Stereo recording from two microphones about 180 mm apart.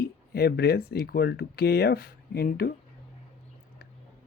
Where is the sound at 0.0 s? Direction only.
60° left (ahead or behind).